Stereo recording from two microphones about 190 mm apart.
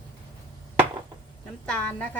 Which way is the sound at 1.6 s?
5° left (ahead or behind).